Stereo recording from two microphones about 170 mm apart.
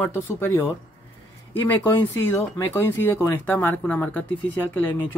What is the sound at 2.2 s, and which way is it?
Speech, 15° left (ahead or behind).